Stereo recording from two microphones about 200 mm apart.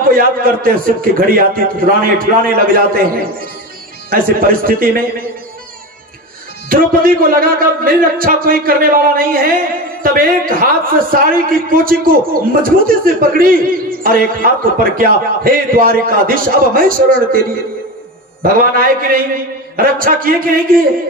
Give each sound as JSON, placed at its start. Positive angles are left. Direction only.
{"t": 0.0, "sound": "a man's voice", "side_deg": -45}
{"t": 6.7, "sound": "a man's voice", "side_deg": -45}